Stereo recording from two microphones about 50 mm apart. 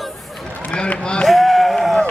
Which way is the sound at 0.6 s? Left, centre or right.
Left.